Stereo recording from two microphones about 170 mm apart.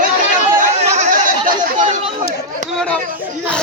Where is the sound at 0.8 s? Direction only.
40° right (ahead or behind).